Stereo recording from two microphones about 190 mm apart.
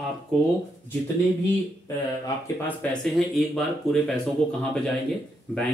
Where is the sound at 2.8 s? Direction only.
5° left (ahead or behind).